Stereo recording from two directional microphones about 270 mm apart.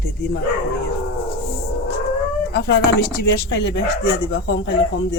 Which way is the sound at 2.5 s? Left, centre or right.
Left.